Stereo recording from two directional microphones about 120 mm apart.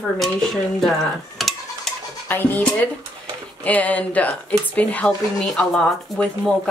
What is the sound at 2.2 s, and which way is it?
Speech, 15° left (ahead or behind).